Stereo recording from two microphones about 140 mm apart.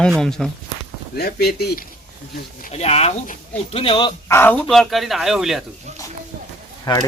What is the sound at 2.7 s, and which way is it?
Speech, 45° left (ahead or behind).